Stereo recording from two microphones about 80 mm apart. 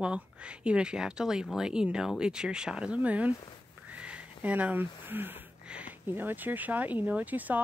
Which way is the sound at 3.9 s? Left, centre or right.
Centre.